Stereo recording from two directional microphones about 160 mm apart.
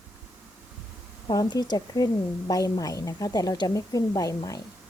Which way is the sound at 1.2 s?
25° left (ahead or behind).